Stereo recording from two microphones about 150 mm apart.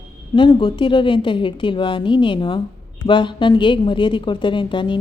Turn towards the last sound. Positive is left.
turn(degrees=30)  # may be behind; listen again after turning